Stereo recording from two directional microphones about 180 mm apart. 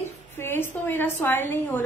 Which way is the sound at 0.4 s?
10° left (ahead or behind).